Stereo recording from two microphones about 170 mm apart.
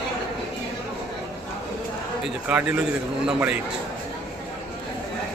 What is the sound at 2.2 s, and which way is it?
A man's voice, 5° right (ahead or behind).